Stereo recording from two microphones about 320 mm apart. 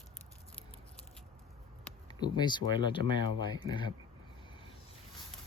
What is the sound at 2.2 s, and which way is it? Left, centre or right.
Speech, centre.